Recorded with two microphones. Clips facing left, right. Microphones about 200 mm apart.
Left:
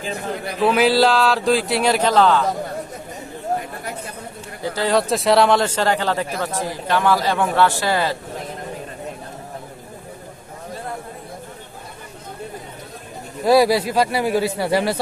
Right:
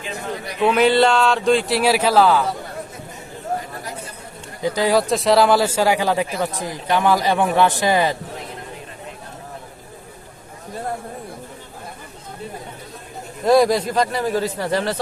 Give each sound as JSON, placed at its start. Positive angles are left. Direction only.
{"t": 0.6, "sound": "speech", "side_deg": 0}
{"t": 4.6, "sound": "speech", "side_deg": -15}
{"t": 4.9, "sound": "speech", "side_deg": 0}
{"t": 13.4, "sound": "speech", "side_deg": 5}